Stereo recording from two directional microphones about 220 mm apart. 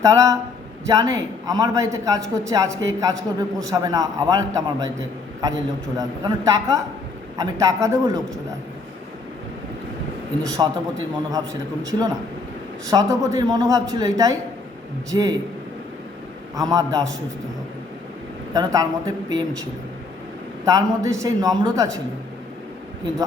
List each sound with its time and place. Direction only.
0.0 s speech: 15° right (ahead or behind)
6.0 s speech: 15° right (ahead or behind)
10.6 s a man's voice: 20° right (ahead or behind)
16.6 s speech: 15° right (ahead or behind)
18.5 s speech: 15° right (ahead or behind)
20.7 s speech: 15° right (ahead or behind)